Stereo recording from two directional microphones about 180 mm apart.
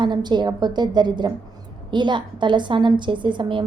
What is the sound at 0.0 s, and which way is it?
A woman's voice, 25° right (ahead or behind).